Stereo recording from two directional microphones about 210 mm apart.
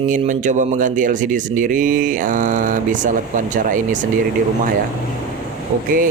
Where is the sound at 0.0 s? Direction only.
35° right (ahead or behind).